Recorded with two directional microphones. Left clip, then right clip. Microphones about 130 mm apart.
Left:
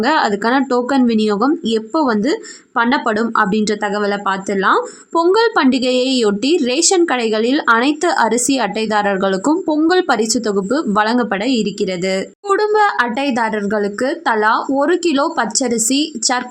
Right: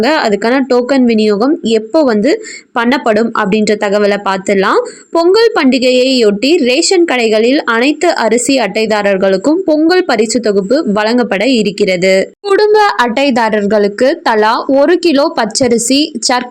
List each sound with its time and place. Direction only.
0.0 s speech: 15° right (ahead or behind)
5.1 s speech: 10° right (ahead or behind)